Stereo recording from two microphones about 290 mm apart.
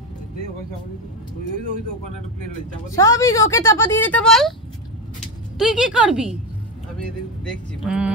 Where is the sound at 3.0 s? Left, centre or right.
Centre.